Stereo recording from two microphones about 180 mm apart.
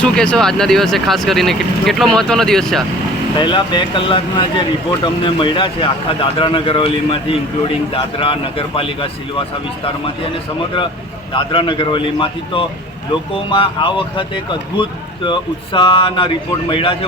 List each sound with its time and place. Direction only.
0.0 s speech: 5° left (ahead or behind)
3.4 s speech: 25° left (ahead or behind)
11.3 s speech: 25° left (ahead or behind)